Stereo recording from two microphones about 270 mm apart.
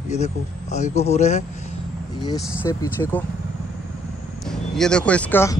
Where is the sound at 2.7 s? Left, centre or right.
Centre.